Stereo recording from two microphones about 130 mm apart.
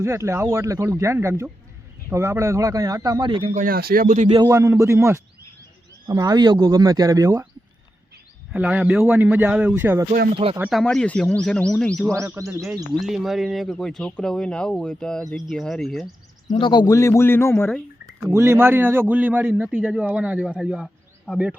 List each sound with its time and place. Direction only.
0.0 s speech: 20° right (ahead or behind); by 3.5 s 40° right (ahead or behind)
3.5 s speech: 90° right
4.4 s speech: 25° right (ahead or behind)
8.5 s a man's voice: 5° right (ahead or behind)
10.7 s speech: centre (ahead or behind)
12.1 s speech: 20° right (ahead or behind)
12.9 s speech: centre (ahead or behind)
16.6 s speech: 40° left (ahead or behind)
16.8 s speech: 25° left (ahead or behind)
18.3 s a man's voice: 20° right (ahead or behind)